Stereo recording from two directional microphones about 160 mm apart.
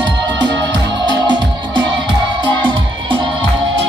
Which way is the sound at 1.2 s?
30° right (ahead or behind).